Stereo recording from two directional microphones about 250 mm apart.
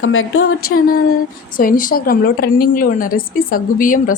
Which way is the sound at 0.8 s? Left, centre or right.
Left.